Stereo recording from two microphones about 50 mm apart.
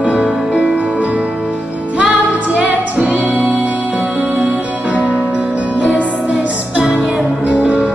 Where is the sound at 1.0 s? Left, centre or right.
Right.